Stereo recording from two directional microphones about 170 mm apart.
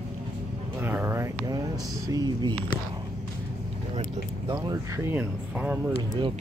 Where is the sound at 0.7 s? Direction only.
10° right (ahead or behind).